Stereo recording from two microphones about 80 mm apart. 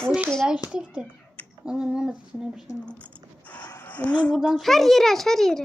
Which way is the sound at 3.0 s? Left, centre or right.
Centre.